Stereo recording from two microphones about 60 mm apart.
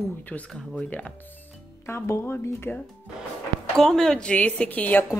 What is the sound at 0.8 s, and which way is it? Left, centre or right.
Speech, left.